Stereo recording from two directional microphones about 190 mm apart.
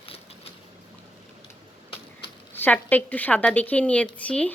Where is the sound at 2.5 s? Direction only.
10° left (ahead or behind).